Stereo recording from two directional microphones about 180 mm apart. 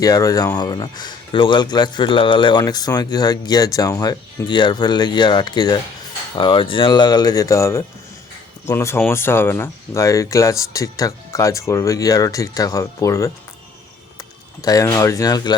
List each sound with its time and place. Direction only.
0.0 s speech: 20° left (ahead or behind)
14.6 s speech: 20° left (ahead or behind)